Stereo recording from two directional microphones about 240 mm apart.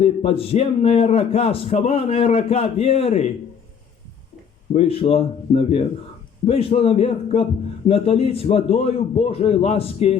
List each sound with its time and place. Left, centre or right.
0.0 s a man's voice: left
4.7 s a man's voice: left